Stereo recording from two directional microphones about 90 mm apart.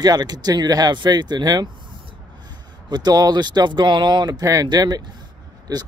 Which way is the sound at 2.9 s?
50° right (ahead or behind).